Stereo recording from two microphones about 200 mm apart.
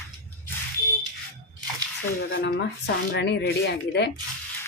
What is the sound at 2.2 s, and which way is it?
Speech, 60° left (ahead or behind).